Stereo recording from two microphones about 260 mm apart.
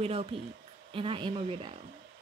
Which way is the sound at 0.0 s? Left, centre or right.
Right.